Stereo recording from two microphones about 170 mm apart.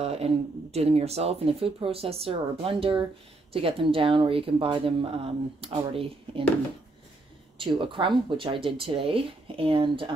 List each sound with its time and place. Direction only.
0.0 s speech: 35° right (ahead or behind)
7.5 s speech: 30° right (ahead or behind)